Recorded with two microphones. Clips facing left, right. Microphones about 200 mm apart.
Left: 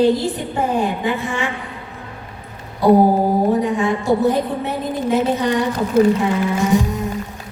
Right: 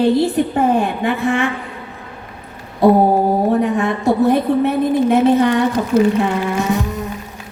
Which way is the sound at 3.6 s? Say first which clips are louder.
Right 2 dB; 60° right (ahead or behind).